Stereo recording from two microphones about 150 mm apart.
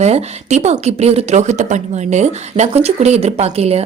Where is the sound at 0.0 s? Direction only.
45° right (ahead or behind).